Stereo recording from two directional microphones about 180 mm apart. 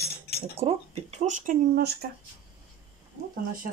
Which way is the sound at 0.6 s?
35° right (ahead or behind).